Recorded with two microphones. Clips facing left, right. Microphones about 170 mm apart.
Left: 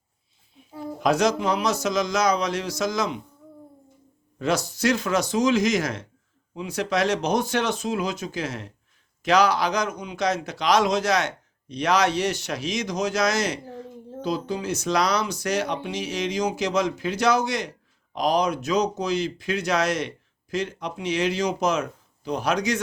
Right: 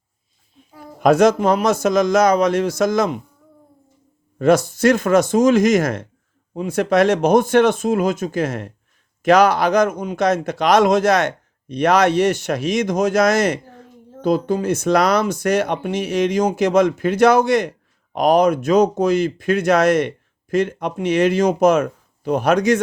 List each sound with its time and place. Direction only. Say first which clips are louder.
0.9 s a man's voice: right 8 dB; 55° right (ahead or behind)
4.4 s a man's voice: right 10 dB; 50° right (ahead or behind)